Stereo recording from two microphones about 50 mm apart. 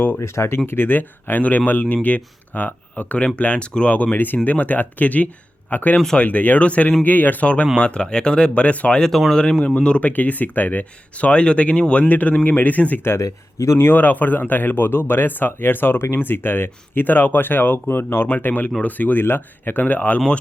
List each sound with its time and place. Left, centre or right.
0.2 s speech: left
0.7 s speech: left
7.4 s speech: left
8.9 s speech: centre
10.1 s speech: left
12.0 s speech: left
13.1 s speech: left
13.9 s speech: left
17.8 s speech: left
18.3 s speech: left